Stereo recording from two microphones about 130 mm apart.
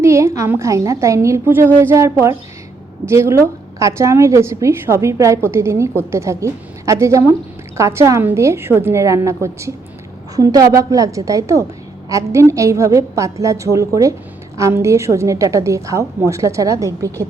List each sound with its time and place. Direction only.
0.0 s a woman's voice: 20° right (ahead or behind)